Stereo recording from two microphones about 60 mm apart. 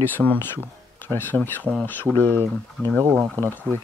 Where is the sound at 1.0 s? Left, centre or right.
Left.